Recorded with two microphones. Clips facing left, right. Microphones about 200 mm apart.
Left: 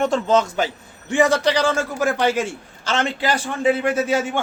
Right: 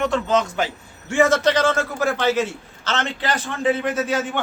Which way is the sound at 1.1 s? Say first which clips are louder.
Even; 15° left (ahead or behind).